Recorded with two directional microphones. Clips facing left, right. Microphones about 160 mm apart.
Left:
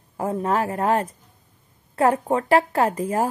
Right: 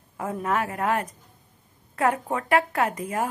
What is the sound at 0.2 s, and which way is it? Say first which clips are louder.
A woman's voice: left 4 dB; 30° left (ahead or behind).